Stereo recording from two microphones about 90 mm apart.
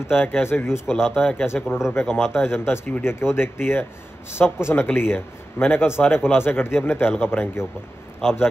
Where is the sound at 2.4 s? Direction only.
25° left (ahead or behind).